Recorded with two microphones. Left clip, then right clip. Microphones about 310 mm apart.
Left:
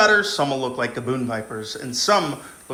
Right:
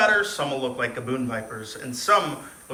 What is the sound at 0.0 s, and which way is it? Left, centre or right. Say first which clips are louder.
A man's voice: left 4 dB; centre.